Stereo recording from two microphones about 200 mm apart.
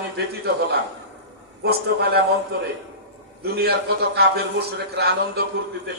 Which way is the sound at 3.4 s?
50° right (ahead or behind).